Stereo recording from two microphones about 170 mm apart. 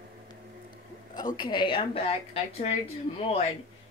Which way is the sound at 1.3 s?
25° left (ahead or behind).